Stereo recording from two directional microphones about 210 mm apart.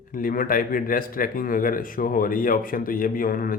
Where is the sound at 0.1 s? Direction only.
40° left (ahead or behind).